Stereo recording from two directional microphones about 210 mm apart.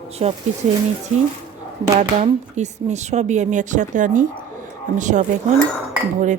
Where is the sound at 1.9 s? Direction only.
30° right (ahead or behind).